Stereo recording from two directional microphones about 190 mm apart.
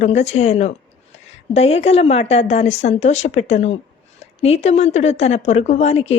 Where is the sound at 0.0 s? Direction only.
35° left (ahead or behind).